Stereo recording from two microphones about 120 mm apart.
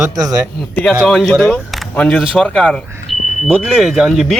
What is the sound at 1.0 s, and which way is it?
Speech, centre (ahead or behind).